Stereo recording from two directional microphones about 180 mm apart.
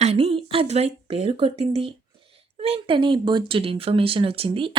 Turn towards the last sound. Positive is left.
turn(degrees=-30)  # may be behind; listen again after turning